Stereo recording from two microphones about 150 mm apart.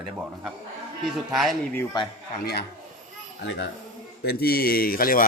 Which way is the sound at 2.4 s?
90° left.